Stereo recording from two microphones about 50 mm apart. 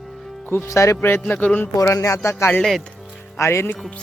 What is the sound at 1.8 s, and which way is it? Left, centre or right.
Speech, left.